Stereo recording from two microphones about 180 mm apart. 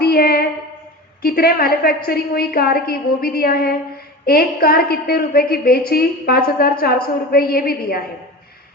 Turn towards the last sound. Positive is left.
turn(degrees=55)  # may be behind; listen again after turning